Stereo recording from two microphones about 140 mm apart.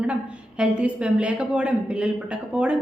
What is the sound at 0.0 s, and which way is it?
A woman's voice, 10° right (ahead or behind).